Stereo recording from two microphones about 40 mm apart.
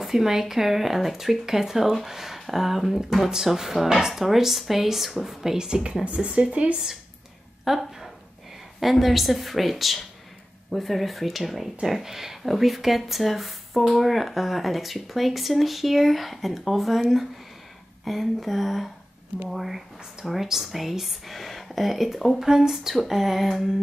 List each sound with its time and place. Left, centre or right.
0.0 s speech: centre
6.0 s speech: right
7.6 s a sound: centre
8.7 s speech: centre